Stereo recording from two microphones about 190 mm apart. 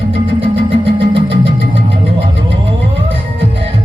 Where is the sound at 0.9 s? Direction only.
30° right (ahead or behind).